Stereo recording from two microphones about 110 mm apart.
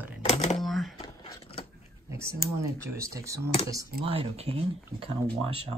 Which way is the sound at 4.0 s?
60° right (ahead or behind).